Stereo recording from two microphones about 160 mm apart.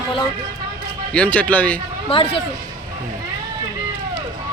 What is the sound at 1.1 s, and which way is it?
Speech, 10° left (ahead or behind).